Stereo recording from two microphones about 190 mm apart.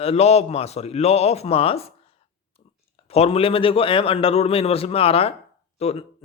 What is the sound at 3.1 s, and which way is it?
Speech, 30° left (ahead or behind).